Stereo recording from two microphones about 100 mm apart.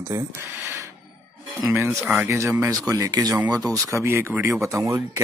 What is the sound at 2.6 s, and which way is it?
Speech, 35° right (ahead or behind).